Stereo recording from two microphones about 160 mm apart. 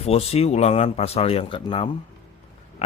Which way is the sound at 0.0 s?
40° left (ahead or behind).